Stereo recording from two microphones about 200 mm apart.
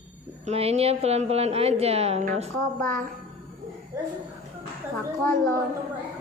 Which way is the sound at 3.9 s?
15° right (ahead or behind).